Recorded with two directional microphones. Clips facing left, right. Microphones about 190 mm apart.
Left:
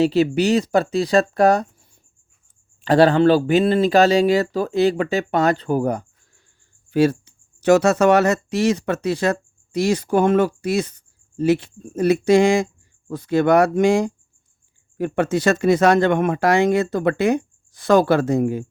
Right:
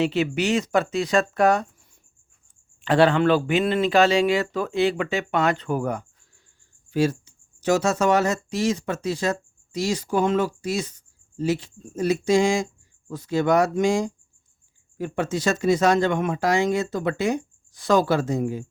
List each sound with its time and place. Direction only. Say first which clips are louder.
0.0 s speech: left 6 dB; 35° left (ahead or behind)
2.8 s speech: left 4 dB; 40° left (ahead or behind)
6.9 s speech: left 5 dB; 60° left (ahead or behind)